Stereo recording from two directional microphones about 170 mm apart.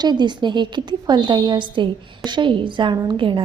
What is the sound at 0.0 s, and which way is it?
A woman's voice, 25° right (ahead or behind).